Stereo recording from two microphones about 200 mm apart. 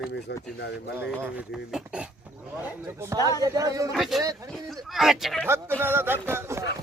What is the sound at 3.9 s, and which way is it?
Speech, centre (ahead or behind).